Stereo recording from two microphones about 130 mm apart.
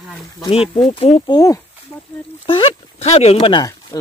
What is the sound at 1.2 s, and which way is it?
Speech, 30° left (ahead or behind).